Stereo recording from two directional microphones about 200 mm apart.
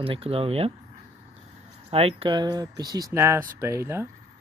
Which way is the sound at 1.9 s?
30° right (ahead or behind).